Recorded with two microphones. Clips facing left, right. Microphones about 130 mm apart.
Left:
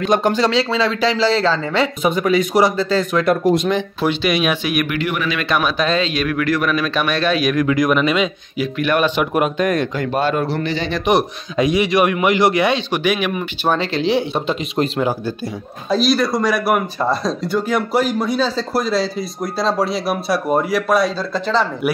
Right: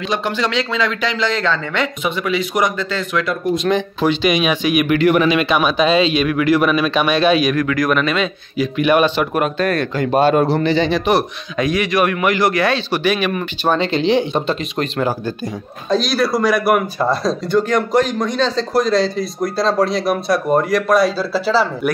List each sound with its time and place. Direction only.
0.0 s speech: 45° left (ahead or behind)
3.6 s speech: 5° left (ahead or behind)
4.8 s speech: 40° right (ahead or behind)
5.2 s a man's voice: 20° right (ahead or behind)
5.5 s speech: centre (ahead or behind)
7.6 s a man's voice: 20° left (ahead or behind)
8.7 s speech: 10° right (ahead or behind)
9.1 s a man's voice: 15° left (ahead or behind)
10.5 s a man's voice: 25° right (ahead or behind)
11.1 s a man's voice: 20° left (ahead or behind); by 21.6 s 5° right (ahead or behind)